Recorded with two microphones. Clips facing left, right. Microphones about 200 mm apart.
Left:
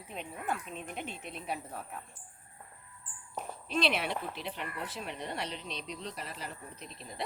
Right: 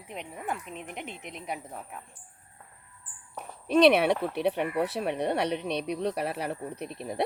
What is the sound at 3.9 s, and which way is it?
Speech, 65° right (ahead or behind).